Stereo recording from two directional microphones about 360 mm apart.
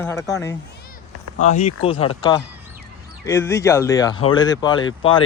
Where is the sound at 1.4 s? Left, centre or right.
Centre.